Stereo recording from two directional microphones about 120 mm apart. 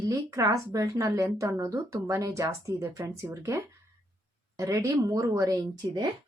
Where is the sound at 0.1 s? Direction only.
30° right (ahead or behind).